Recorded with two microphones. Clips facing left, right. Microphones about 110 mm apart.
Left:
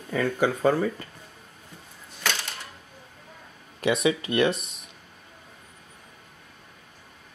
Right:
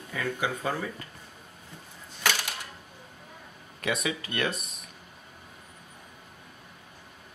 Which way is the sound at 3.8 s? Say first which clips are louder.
Left 7 dB; 30° left (ahead or behind).